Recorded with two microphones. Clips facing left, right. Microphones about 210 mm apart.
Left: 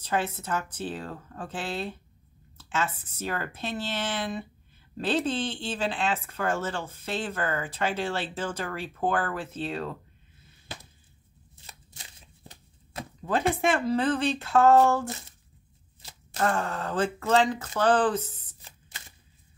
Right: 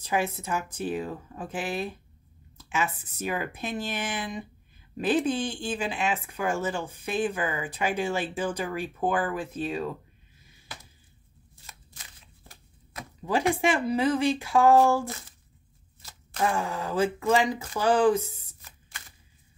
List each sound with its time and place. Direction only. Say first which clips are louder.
0.4 s speech: right 1 dB; 10° right (ahead or behind)
11.6 s chopping: left 1 dB; 20° left (ahead or behind)
13.2 s speech: right 1 dB; 10° right (ahead or behind)
16.3 s speech: even; 10° right (ahead or behind)
18.6 s a sound: even; 25° left (ahead or behind)